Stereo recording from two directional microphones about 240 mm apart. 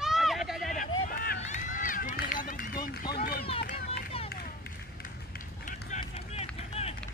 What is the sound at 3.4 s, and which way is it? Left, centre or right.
Run, left.